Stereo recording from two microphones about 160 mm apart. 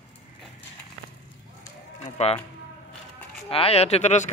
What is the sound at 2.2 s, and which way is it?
Speech, 45° left (ahead or behind).